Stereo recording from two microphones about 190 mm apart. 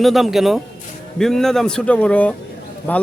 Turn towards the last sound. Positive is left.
turn(degrees=10)  # may be behind; listen again after turning